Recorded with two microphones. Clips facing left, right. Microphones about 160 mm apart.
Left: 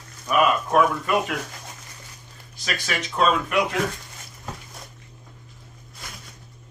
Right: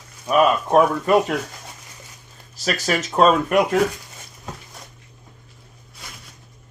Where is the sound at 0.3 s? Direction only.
35° right (ahead or behind).